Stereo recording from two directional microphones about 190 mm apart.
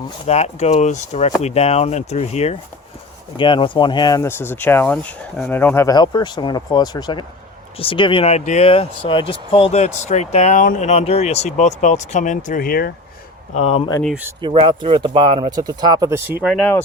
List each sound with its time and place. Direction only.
0.3 s speech: 35° left (ahead or behind); by 12.9 s 50° left (ahead or behind)
13.5 s speech: 35° left (ahead or behind)
14.4 s speech: 25° right (ahead or behind); by 16.6 s 5° right (ahead or behind)